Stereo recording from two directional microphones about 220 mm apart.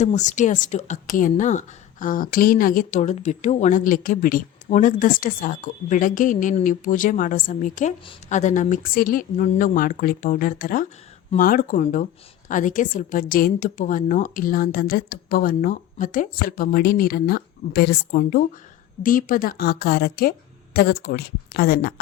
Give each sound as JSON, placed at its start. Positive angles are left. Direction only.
{"t": 0.0, "sound": "a woman's voice", "side_deg": 30}